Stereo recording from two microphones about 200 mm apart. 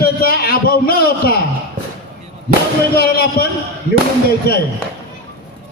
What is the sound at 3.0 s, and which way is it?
Speech, 50° left (ahead or behind).